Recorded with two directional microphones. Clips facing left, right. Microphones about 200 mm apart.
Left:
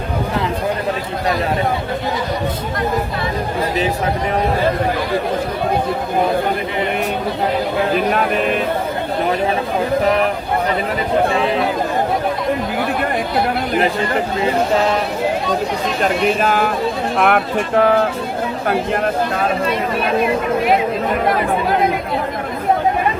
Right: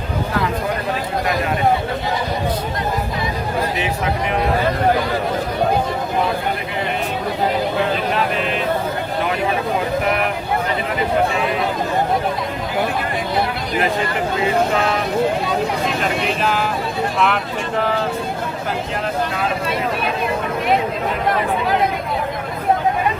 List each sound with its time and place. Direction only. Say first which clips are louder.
16.0 s speech: left 4 dB; 45° left (ahead or behind)